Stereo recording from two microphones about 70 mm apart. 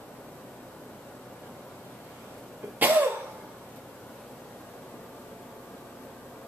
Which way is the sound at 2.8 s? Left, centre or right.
Right.